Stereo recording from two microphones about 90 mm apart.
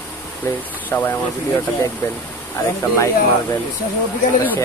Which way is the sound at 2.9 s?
35° left (ahead or behind).